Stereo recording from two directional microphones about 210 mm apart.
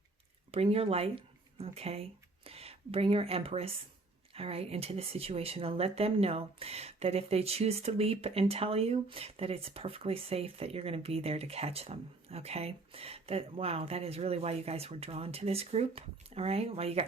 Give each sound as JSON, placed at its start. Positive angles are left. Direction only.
{"t": 0.5, "sound": "speech", "side_deg": -30}